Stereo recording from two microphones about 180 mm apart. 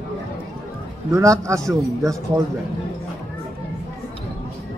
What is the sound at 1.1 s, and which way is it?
A man's voice, 15° right (ahead or behind).